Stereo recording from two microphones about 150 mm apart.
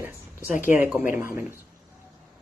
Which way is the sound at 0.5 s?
60° left (ahead or behind).